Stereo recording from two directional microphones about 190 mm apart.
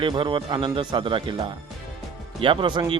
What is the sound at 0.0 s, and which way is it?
A man's voice, 25° right (ahead or behind).